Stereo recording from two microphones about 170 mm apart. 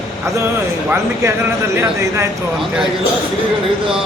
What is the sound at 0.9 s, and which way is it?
Speech, 15° right (ahead or behind).